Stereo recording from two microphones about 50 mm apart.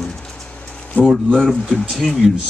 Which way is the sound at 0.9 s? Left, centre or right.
Left.